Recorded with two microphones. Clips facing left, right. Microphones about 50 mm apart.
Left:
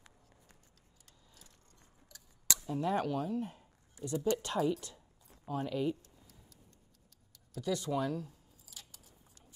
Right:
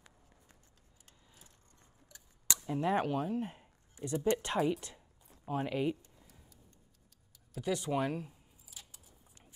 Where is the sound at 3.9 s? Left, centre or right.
Right.